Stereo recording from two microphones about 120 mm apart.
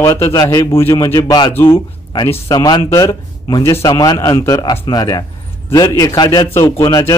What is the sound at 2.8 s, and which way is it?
A man's voice, 25° left (ahead or behind).